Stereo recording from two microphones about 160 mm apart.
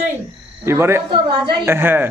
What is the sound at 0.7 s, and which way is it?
A man's voice, 15° right (ahead or behind).